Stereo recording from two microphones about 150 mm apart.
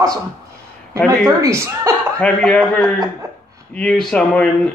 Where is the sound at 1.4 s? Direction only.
20° right (ahead or behind).